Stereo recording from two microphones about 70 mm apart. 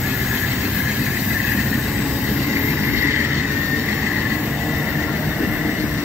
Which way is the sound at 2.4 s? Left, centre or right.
Right.